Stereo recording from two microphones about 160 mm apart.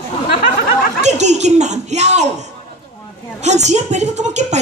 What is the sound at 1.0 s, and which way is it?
Speech, 45° right (ahead or behind).